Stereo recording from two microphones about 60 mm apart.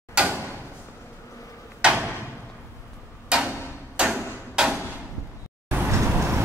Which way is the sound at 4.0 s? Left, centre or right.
Centre.